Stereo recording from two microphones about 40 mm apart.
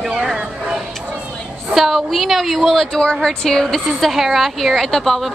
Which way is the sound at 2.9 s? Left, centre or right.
Left.